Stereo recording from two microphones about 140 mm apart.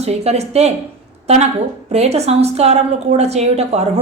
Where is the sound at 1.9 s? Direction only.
50° right (ahead or behind).